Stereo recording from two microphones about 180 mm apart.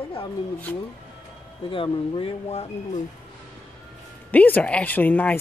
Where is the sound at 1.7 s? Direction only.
30° left (ahead or behind).